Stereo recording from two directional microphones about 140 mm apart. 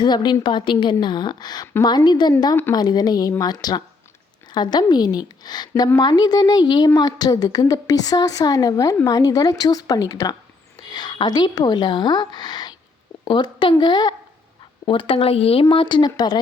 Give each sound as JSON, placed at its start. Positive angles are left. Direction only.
{"t": 0.0, "sound": "a woman's voice", "side_deg": 30}